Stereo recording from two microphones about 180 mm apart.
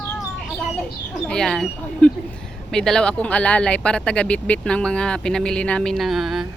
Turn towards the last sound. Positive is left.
turn(degrees=0)  # may be behind; listen again after turning